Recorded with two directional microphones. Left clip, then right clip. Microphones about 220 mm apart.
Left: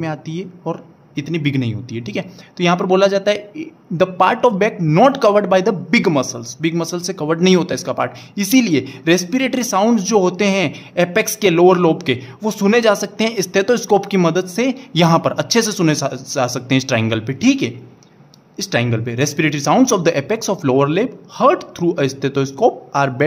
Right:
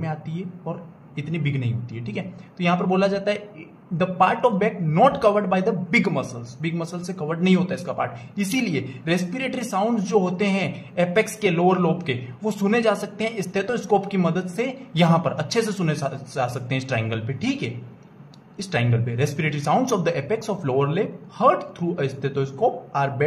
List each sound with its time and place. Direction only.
0.0 s speech: 50° left (ahead or behind)